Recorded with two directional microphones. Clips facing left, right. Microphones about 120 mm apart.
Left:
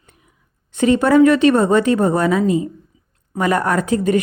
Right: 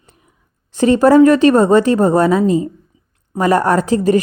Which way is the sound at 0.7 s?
35° right (ahead or behind).